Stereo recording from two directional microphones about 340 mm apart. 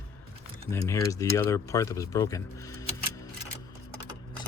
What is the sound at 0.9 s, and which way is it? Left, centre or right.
Speech, centre.